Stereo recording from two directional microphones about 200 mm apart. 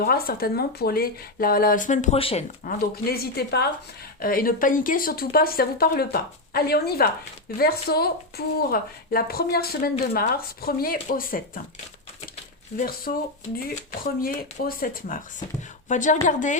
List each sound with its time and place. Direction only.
0.0 s speech: 50° left (ahead or behind); by 2.4 s 30° left (ahead or behind)
2.6 s speech: 50° left (ahead or behind)
13.1 s a woman's voice: 40° left (ahead or behind)